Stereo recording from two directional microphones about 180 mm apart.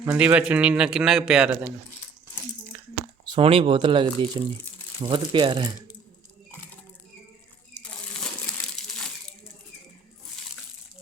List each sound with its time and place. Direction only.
0.0 s a man's voice: 10° right (ahead or behind)
2.7 s a sound: 10° right (ahead or behind)
3.2 s speech: 30° right (ahead or behind)